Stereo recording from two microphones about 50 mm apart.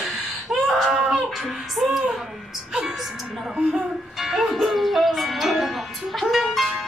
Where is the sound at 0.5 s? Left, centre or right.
Centre.